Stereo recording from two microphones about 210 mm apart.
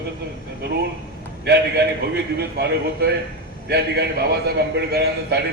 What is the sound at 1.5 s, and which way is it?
A man's voice, 50° right (ahead or behind).